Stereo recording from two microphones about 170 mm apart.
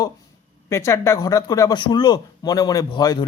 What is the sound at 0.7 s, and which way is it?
Speech, 15° left (ahead or behind).